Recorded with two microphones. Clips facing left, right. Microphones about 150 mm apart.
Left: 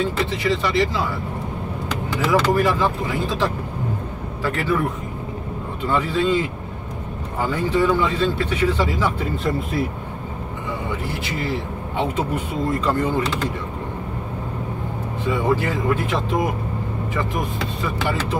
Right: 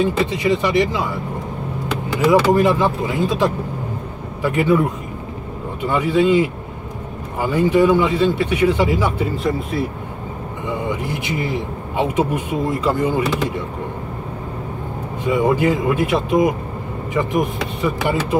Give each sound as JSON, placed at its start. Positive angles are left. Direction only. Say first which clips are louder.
{"t": 0.0, "sound": "a man's voice", "louder": "right 4 dB", "side_deg": -15}
{"t": 2.2, "sound": "a man's voice", "louder": "right 5 dB", "side_deg": -15}
{"t": 9.4, "sound": "speech", "louder": "left 1 dB", "side_deg": 0}
{"t": 11.2, "sound": "a man's voice", "louder": "right 3 dB", "side_deg": -15}
{"t": 15.2, "sound": "a man's voice", "louder": "right 5 dB", "side_deg": -15}